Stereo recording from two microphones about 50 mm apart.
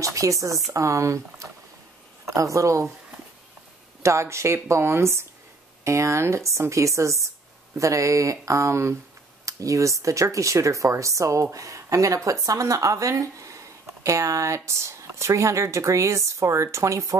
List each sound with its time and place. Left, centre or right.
0.0 s speech: right
4.0 s speech: right
5.9 s speech: right